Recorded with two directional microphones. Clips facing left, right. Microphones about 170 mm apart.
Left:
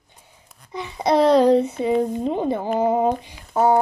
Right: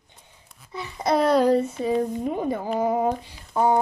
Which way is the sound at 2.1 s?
25° left (ahead or behind).